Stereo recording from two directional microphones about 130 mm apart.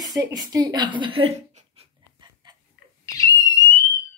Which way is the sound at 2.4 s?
35° right (ahead or behind).